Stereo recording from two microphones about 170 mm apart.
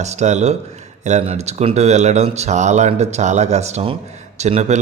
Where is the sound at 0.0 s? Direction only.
40° right (ahead or behind).